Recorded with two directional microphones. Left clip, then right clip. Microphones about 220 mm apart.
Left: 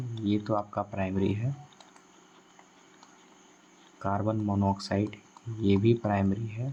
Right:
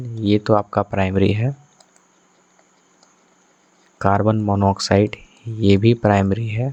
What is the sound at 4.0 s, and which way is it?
Speech, 40° right (ahead or behind).